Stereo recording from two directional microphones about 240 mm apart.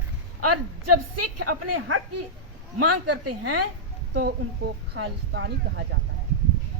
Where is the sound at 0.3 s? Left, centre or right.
Right.